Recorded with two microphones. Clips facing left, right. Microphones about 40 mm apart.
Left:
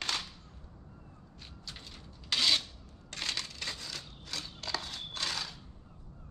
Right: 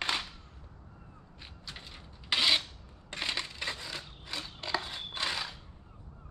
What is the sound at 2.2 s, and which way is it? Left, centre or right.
Filing, right.